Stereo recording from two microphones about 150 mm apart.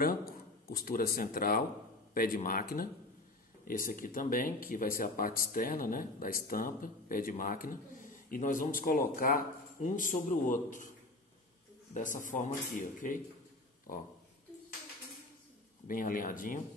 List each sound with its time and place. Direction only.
0.0 s speech: 80° left; by 10.9 s 60° left (ahead or behind)
11.9 s speech: 60° left (ahead or behind)
15.9 s speech: 65° left (ahead or behind)